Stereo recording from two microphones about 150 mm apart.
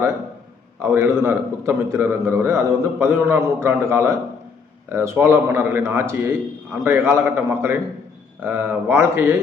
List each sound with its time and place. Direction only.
0.8 s a man's voice: 15° right (ahead or behind)